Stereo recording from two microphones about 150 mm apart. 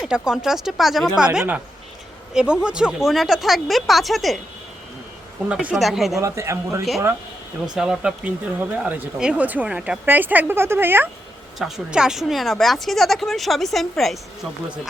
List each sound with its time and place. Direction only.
0.0 s speech: 5° right (ahead or behind)
5.5 s speech: 5° right (ahead or behind)
6.1 s a man's voice: 20° right (ahead or behind)
7.8 s a woman's voice: 5° right (ahead or behind)